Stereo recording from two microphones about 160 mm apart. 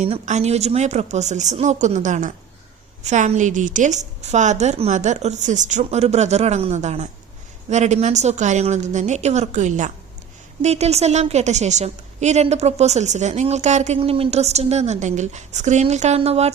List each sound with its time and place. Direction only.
0.0 s a woman's voice: 45° right (ahead or behind)